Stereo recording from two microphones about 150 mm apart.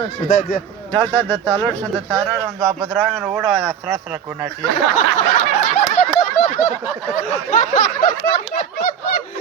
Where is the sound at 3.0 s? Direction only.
Centre (ahead or behind).